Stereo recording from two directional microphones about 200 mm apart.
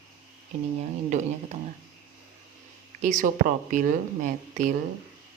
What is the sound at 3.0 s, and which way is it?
A woman's voice, 40° right (ahead or behind).